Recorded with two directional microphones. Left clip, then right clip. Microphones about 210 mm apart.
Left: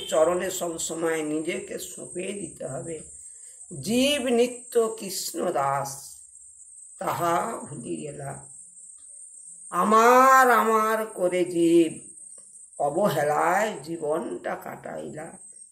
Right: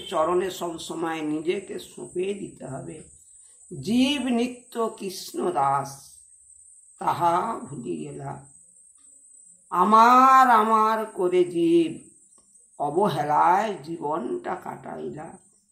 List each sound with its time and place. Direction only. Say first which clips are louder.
0.0 s speech: left 1 dB; 20° left (ahead or behind)
3.8 s speech: left 1 dB; 15° left (ahead or behind)
7.0 s speech: right 3 dB; 15° left (ahead or behind)
9.7 s speech: right 2 dB; 15° left (ahead or behind)